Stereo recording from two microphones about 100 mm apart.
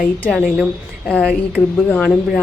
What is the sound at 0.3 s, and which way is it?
A woman's voice, 5° right (ahead or behind).